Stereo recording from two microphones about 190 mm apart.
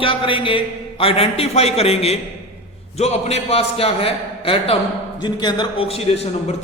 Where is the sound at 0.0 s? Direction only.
30° left (ahead or behind).